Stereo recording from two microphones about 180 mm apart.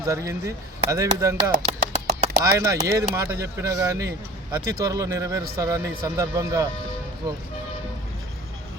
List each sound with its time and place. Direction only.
0.0 s speech: 15° right (ahead or behind)
1.6 s a sound: 35° right (ahead or behind)
2.4 s speech: 20° right (ahead or behind)